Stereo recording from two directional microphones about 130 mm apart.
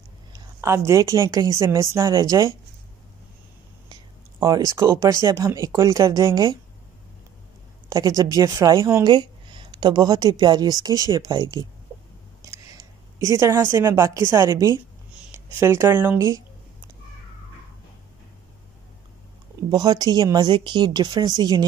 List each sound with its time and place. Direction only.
0.3 s a woman's voice: 20° right (ahead or behind)
3.9 s speech: 30° right (ahead or behind)
7.9 s speech: 30° right (ahead or behind)
9.0 s a woman's voice: 35° right (ahead or behind)
19.7 s a woman's voice: 30° right (ahead or behind)